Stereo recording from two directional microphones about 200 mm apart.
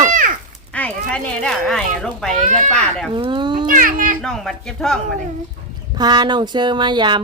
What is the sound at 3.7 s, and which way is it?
Speech, 45° right (ahead or behind).